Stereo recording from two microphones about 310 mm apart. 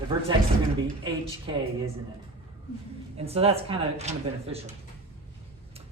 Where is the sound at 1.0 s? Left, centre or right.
Centre.